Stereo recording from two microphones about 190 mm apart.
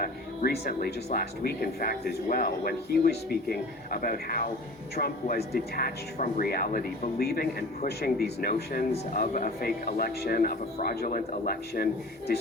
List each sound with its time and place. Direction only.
0.0 s speech: 55° left (ahead or behind)
6.1 s speech: 40° left (ahead or behind)
7.2 s speech: 55° left (ahead or behind)